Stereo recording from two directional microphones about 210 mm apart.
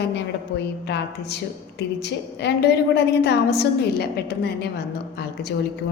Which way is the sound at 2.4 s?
50° left (ahead or behind).